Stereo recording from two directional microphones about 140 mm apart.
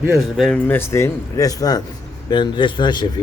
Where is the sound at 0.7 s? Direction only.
15° left (ahead or behind).